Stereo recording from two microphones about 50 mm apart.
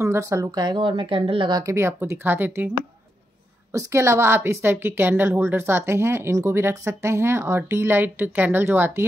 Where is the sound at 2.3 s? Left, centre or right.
Right.